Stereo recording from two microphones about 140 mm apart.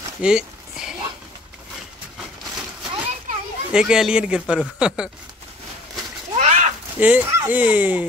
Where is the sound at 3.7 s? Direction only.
5° right (ahead or behind).